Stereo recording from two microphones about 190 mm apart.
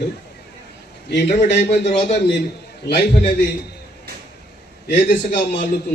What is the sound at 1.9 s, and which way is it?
Speech, 35° left (ahead or behind).